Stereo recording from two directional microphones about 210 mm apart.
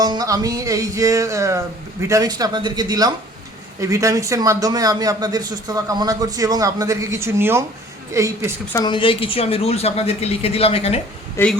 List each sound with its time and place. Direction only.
0.0 s speech: 20° right (ahead or behind)
8.7 s a woman's voice: 20° left (ahead or behind)
11.4 s a man's voice: 10° left (ahead or behind)